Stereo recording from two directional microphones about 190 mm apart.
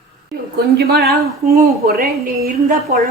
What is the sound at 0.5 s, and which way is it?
A woman's voice, 55° right (ahead or behind).